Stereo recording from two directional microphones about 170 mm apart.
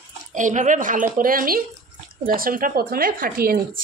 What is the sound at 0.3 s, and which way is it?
A woman's voice, 50° right (ahead or behind).